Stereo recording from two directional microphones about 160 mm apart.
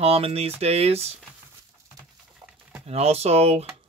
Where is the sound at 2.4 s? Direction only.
25° right (ahead or behind).